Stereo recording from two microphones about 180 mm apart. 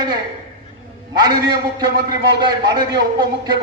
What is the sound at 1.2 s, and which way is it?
A man's voice, 25° right (ahead or behind).